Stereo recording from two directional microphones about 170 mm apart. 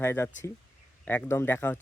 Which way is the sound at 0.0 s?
15° left (ahead or behind).